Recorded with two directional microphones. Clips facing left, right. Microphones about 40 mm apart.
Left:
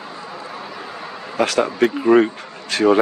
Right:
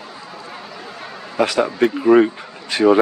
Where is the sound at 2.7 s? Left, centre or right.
Centre.